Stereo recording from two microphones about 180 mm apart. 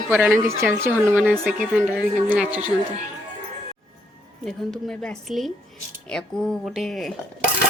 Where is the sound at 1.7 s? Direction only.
5° right (ahead or behind).